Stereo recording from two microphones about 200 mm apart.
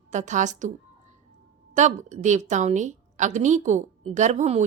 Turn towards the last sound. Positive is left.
turn(degrees=-35)  # may be behind; listen again after turning